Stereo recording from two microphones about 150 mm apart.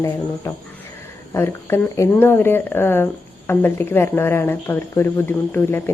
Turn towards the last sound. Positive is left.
turn(degrees=15)  # may be behind; listen again after turning